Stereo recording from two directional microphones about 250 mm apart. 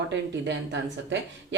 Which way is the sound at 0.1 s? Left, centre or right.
Right.